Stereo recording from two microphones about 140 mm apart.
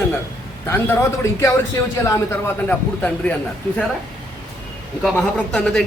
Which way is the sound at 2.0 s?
20° left (ahead or behind).